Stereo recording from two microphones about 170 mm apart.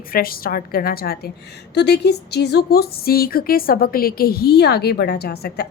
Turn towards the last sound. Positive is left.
turn(degrees=70)  # may be behind; listen again after turning